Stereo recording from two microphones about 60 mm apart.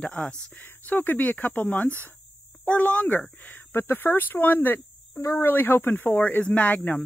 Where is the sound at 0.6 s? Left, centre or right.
Left.